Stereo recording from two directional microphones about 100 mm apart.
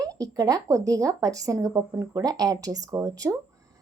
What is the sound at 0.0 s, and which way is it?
A woman's voice, 35° right (ahead or behind).